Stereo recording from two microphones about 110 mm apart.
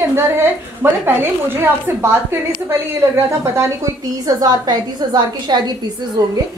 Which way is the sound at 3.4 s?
25° right (ahead or behind).